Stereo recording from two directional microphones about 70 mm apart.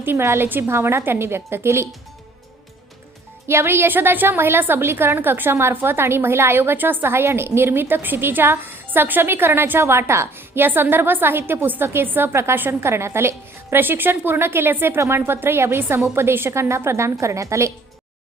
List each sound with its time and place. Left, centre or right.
0.0 s a woman's voice: right
3.4 s a woman's voice: right